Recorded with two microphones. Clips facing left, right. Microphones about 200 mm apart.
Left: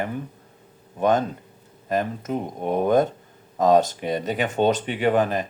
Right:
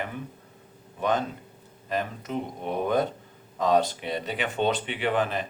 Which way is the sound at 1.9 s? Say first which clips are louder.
Left 5 dB; 45° left (ahead or behind).